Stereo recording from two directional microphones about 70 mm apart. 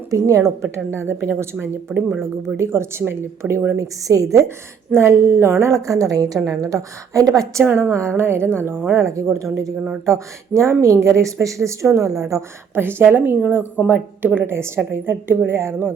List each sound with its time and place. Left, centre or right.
0.1 s a woman's voice: right
0.9 s a woman's voice: right
1.9 s speech: centre
2.6 s a woman's voice: right
3.8 s a woman's voice: right
7.6 s a woman's voice: right
12.7 s a woman's voice: right